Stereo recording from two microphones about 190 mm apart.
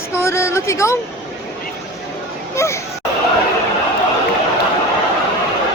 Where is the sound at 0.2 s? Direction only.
15° left (ahead or behind).